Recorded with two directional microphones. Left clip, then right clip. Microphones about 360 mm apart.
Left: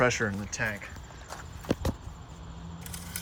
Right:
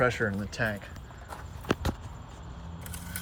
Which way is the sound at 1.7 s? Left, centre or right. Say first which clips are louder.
Right 1 dB; left.